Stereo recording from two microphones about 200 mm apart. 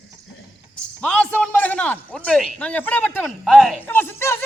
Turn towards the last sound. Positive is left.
turn(degrees=10)  # may be behind; listen again after turning